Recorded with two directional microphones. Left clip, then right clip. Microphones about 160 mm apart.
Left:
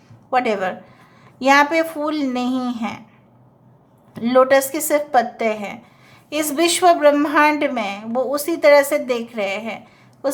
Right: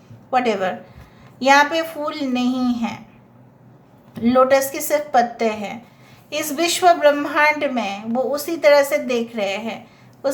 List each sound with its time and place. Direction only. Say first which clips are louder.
0.3 s a woman's voice: even; 30° left (ahead or behind)
4.1 s a woman's voice: left 1 dB; 30° left (ahead or behind)
10.2 s a sound: even; 30° left (ahead or behind)